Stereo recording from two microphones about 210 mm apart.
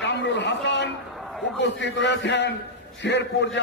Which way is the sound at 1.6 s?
55° left (ahead or behind).